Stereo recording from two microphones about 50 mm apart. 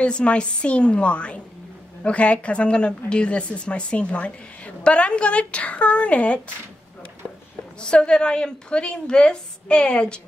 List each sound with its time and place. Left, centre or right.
0.0 s a woman's voice: left
7.9 s a woman's voice: centre